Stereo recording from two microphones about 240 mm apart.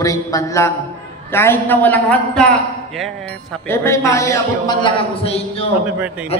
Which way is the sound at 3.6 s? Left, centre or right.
Centre.